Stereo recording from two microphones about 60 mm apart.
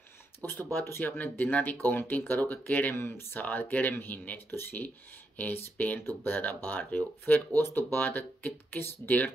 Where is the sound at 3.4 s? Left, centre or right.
Left.